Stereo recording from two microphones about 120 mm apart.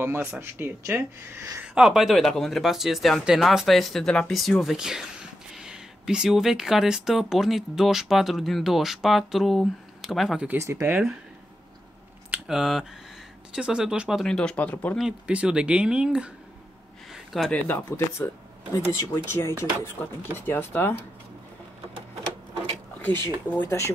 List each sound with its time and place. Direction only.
0.2 s speech: 20° right (ahead or behind)
1.8 s speech: 5° right (ahead or behind)
10.6 s speech: 25° right (ahead or behind)
12.3 s speech: 5° right (ahead or behind); by 15.0 s 15° left (ahead or behind)
15.0 s speech: 5° right (ahead or behind)
17.1 s a sound: centre (ahead or behind)
17.5 s speech: 15° left (ahead or behind)
23.0 s speech: 20° left (ahead or behind)